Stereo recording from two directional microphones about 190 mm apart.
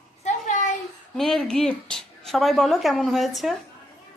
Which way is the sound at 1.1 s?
5° left (ahead or behind).